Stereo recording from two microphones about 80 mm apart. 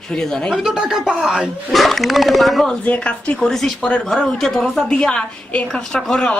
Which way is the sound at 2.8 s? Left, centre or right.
Centre.